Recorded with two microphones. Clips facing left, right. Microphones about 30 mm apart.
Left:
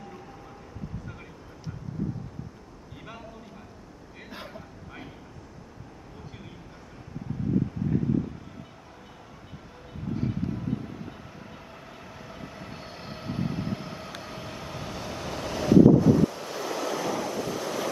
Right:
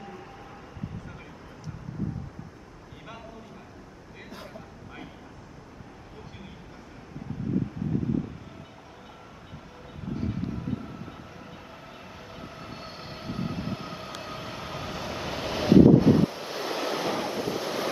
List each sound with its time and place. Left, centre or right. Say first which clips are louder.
4.6 s vehicle: even; centre
10.1 s vehicle: left 1 dB; centre
12.3 s train: even; centre
14.2 s vehicle: right 1 dB; centre